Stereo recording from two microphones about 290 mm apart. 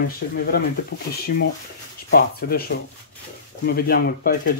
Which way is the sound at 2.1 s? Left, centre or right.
Left.